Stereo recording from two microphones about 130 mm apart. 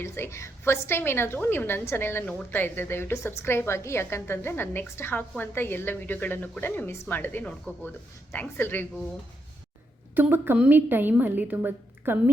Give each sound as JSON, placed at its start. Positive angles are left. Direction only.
{"t": 0.0, "sound": "a woman's voice", "side_deg": 20}
{"t": 10.2, "sound": "a woman's voice", "side_deg": -15}